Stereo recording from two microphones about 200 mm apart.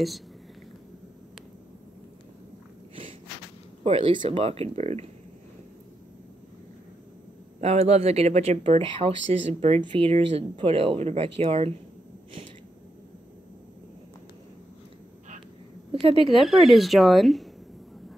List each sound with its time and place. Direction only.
3.8 s speech: 30° right (ahead or behind)
7.6 s speech: 30° right (ahead or behind)
15.9 s a sound: 25° right (ahead or behind)
16.3 s speech: centre (ahead or behind)